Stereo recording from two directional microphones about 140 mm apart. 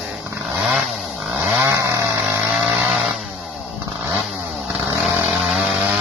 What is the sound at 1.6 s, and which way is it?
Chainsaw, 20° right (ahead or behind).